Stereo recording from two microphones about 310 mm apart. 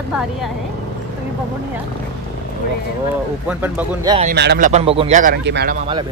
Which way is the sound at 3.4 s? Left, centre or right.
Centre.